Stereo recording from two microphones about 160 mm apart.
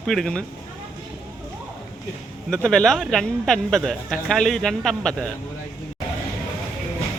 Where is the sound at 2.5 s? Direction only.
5° left (ahead or behind).